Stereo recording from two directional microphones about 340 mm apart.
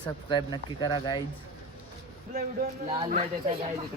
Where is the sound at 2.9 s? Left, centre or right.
Centre.